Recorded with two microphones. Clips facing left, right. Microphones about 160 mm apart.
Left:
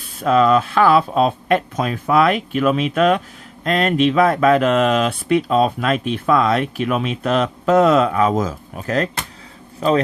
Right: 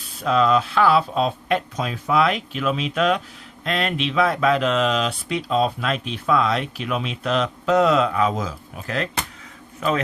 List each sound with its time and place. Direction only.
0.2 s a man's voice: 50° left (ahead or behind); by 10.0 s 35° left (ahead or behind)